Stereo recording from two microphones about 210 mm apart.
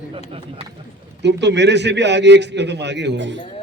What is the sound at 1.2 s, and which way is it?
A man's voice, 55° right (ahead or behind).